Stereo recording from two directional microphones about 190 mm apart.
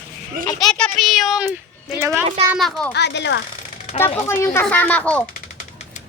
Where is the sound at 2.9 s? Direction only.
65° left (ahead or behind).